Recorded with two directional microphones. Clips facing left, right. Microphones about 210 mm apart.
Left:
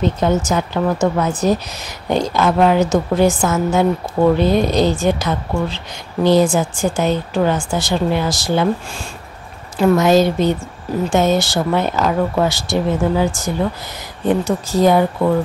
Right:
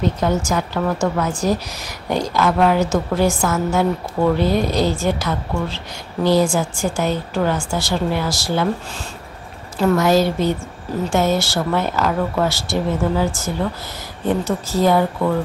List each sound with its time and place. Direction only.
0.0 s a woman's voice: 20° left (ahead or behind)